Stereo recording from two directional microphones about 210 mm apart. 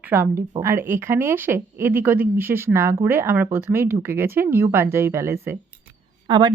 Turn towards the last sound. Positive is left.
turn(degrees=-20)  # may be behind; listen again after turning